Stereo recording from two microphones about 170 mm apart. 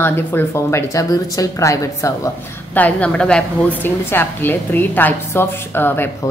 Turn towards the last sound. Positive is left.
turn(degrees=10)  # may be behind; listen again after turning